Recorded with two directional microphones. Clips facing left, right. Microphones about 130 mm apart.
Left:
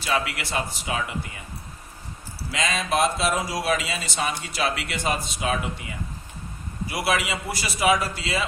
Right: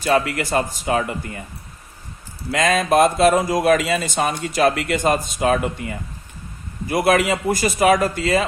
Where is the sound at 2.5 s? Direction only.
50° right (ahead or behind).